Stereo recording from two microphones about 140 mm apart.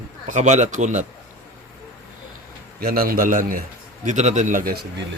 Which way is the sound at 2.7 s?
90° right.